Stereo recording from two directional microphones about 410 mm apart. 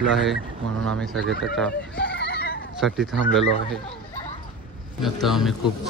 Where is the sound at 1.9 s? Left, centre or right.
Left.